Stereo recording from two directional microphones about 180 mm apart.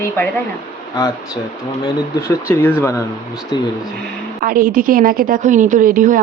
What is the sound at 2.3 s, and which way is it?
Speech, 15° left (ahead or behind).